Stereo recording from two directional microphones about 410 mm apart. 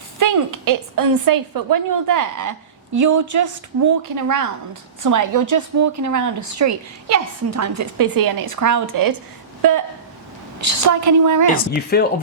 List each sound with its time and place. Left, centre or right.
0.2 s a woman's voice: right
11.5 s speech: left